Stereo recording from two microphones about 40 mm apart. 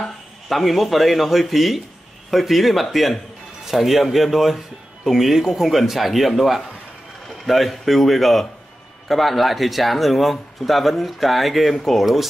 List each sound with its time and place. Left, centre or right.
0.5 s speech: centre